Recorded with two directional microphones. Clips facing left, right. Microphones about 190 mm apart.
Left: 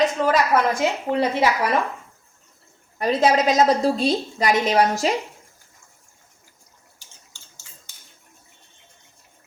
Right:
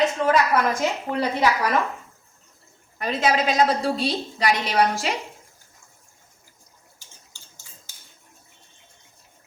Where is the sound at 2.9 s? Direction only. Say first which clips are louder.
Left 4 dB; 35° left (ahead or behind).